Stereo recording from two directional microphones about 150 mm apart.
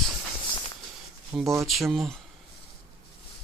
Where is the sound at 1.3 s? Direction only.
Centre (ahead or behind).